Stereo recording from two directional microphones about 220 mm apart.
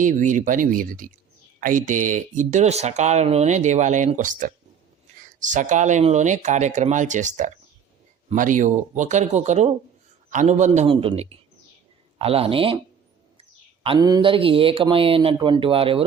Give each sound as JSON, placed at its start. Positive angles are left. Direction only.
{"t": 0.0, "sound": "speech", "side_deg": -35}
{"t": 13.8, "sound": "speech", "side_deg": -20}